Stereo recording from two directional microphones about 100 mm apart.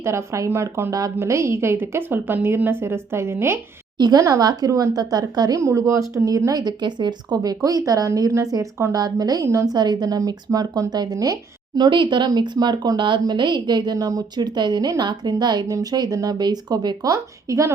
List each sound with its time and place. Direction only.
0.0 s speech: 25° right (ahead or behind)
3.9 s a woman's voice: 45° right (ahead or behind)
9.7 s a woman's voice: 45° right (ahead or behind)
11.8 s speech: 50° right (ahead or behind); by 17.7 s 35° right (ahead or behind)